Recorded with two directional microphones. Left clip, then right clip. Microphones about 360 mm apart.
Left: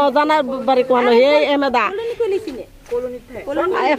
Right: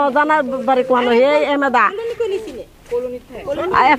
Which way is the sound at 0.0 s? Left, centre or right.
Right.